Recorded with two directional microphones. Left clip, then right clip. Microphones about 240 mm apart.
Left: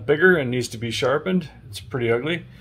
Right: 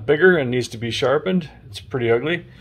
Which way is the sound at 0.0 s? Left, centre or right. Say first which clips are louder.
Right 2 dB; centre.